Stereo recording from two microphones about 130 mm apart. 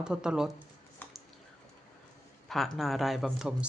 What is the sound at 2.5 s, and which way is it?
Speech, centre (ahead or behind).